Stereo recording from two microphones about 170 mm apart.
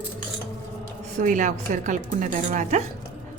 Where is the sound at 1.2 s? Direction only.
50° right (ahead or behind).